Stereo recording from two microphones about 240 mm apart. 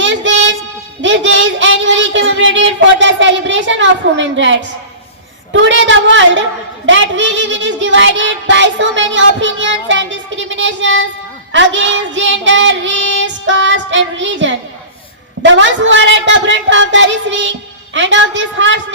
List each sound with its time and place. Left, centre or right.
0.0 s child singing: right